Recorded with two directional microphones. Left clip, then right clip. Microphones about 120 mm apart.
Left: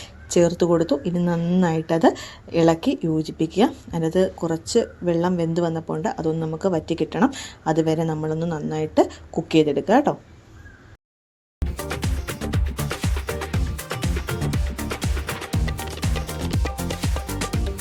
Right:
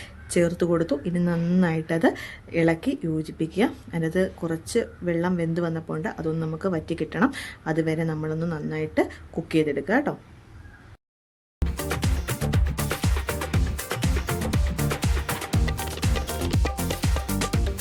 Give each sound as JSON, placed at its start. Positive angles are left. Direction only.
{"t": 0.4, "sound": "a woman's voice", "side_deg": 5}
{"t": 2.1, "sound": "a woman's voice", "side_deg": -35}
{"t": 2.6, "sound": "a woman's voice", "side_deg": 20}
{"t": 11.8, "sound": "music", "side_deg": 0}